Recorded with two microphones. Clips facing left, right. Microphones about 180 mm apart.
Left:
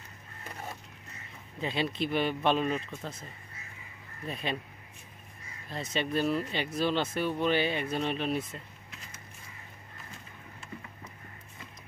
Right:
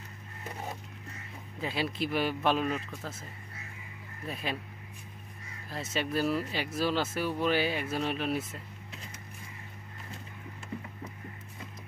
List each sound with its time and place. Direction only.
1.6 s speech: 5° right (ahead or behind)
4.3 s speech: 5° right (ahead or behind)
5.7 s speech: 5° right (ahead or behind)